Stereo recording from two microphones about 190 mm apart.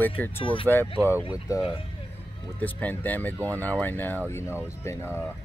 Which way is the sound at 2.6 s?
10° left (ahead or behind).